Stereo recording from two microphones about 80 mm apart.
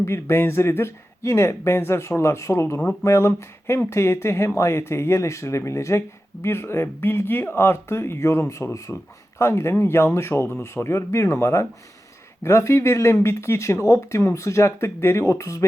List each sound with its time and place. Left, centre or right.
0.0 s speech: left